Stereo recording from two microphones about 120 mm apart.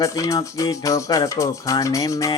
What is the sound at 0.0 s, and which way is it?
Music, 25° left (ahead or behind).